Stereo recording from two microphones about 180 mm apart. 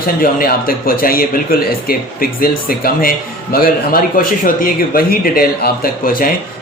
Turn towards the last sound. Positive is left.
turn(degrees=50)  # may be behind; listen again after turning